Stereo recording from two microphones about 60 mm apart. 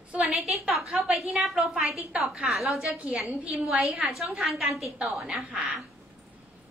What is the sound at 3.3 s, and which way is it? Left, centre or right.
Speech, right.